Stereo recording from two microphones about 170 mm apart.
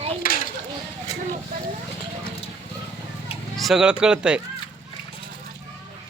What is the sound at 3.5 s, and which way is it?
Speech, centre (ahead or behind).